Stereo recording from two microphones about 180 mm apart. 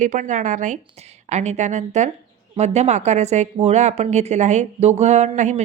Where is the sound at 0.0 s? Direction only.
45° right (ahead or behind).